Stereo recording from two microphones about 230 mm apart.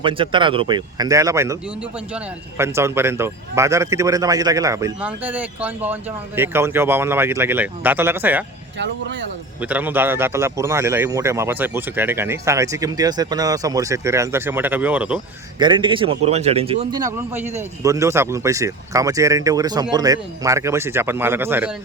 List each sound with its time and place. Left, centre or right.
0.0 s a man's voice: right
9.6 s speech: centre
15.5 s a man's voice: centre